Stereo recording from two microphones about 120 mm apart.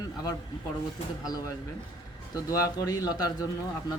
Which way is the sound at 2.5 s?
30° left (ahead or behind).